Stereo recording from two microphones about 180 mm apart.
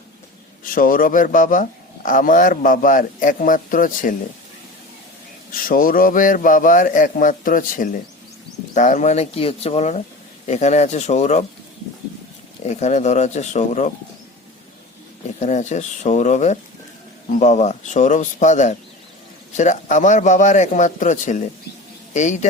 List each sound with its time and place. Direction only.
0.6 s a man's voice: 50° left (ahead or behind)
5.6 s a man's voice: 50° left (ahead or behind)
12.6 s speech: 40° left (ahead or behind)
15.4 s a man's voice: 40° left (ahead or behind)